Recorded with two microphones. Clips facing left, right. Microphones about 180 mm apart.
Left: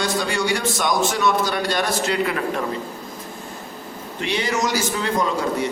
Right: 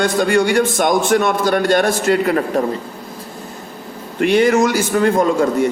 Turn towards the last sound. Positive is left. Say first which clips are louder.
# right 7 dB
turn(degrees=-50)  # may be behind; listen again after turning